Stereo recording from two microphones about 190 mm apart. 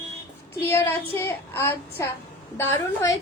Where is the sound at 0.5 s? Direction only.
15° left (ahead or behind).